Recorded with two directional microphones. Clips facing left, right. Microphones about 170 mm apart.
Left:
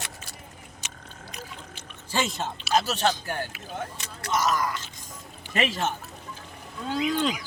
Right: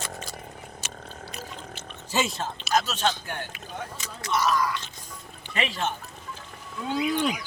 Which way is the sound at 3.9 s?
60° left (ahead or behind).